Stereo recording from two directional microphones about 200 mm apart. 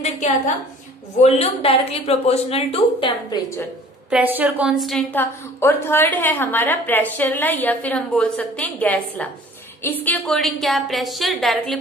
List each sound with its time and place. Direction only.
1.2 s speech: 30° left (ahead or behind)
4.1 s a woman's voice: 10° right (ahead or behind)